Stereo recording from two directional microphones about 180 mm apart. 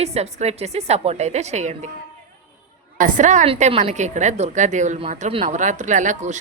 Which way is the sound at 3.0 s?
45° right (ahead or behind).